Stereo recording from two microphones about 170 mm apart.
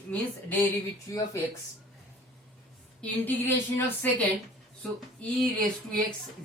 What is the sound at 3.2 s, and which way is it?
A woman's voice, 10° left (ahead or behind).